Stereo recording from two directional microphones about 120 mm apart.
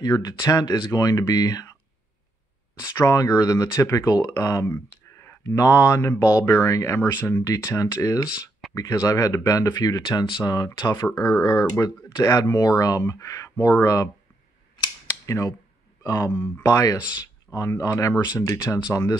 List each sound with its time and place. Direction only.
0.0 s speech: 35° left (ahead or behind)
3.0 s speech: 30° left (ahead or behind)
14.8 s a sound: 30° left (ahead or behind)
16.0 s speech: 25° left (ahead or behind)